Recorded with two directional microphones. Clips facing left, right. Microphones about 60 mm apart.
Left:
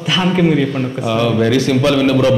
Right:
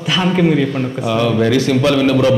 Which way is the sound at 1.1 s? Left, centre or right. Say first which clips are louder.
Even; right.